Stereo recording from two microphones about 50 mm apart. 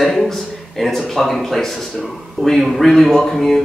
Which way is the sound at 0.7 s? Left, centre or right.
Centre.